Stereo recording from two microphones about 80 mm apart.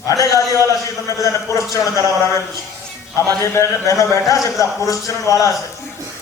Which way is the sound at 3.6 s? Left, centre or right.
Left.